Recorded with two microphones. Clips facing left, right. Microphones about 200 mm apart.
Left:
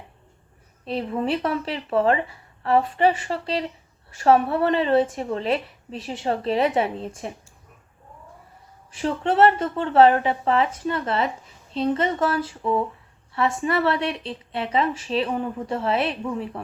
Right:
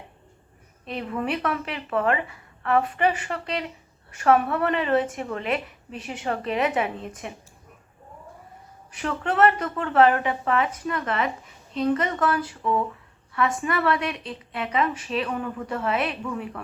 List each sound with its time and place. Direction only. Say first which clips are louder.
0.9 s a woman's voice: left 4 dB; 30° left (ahead or behind)
8.9 s a woman's voice: left 4 dB; 30° left (ahead or behind)